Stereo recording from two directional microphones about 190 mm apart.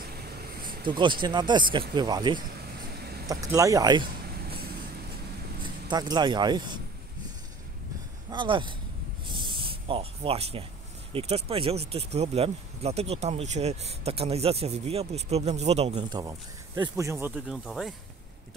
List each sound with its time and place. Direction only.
0.1 s vehicle: 55° right (ahead or behind)
0.8 s speech: 25° right (ahead or behind)
5.6 s speech: 20° right (ahead or behind)
8.3 s speech: 25° right (ahead or behind)
9.3 s spray: 25° right (ahead or behind)
11.1 s speech: 30° right (ahead or behind); by 17.3 s 15° right (ahead or behind)
17.5 s speech: centre (ahead or behind)